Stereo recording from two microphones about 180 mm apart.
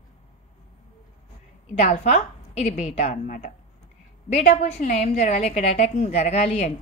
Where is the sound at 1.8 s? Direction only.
40° left (ahead or behind).